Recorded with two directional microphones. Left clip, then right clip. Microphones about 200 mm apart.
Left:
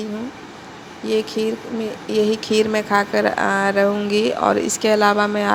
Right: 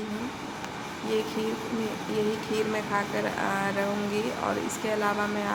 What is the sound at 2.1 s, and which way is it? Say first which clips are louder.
Speech: left 12 dB; 40° left (ahead or behind).